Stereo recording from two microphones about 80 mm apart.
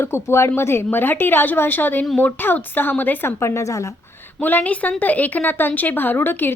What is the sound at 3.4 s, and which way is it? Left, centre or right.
Speech, left.